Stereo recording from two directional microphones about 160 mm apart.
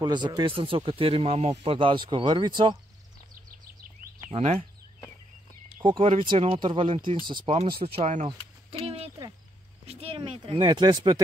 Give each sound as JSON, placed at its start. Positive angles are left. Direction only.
{"t": 0.0, "sound": "speech", "side_deg": -25}
{"t": 4.3, "sound": "speech", "side_deg": -40}
{"t": 6.1, "sound": "speech", "side_deg": -35}
{"t": 8.8, "sound": "a sound", "side_deg": -35}
{"t": 9.8, "sound": "speech", "side_deg": -40}